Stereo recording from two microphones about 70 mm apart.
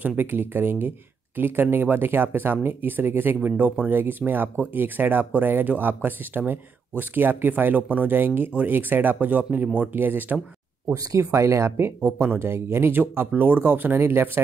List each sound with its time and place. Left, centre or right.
0.0 s speech: right
10.9 s speech: right